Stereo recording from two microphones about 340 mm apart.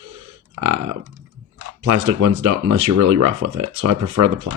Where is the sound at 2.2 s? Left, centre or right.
Right.